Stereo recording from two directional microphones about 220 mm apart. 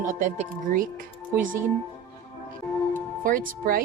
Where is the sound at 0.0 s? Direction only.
35° right (ahead or behind).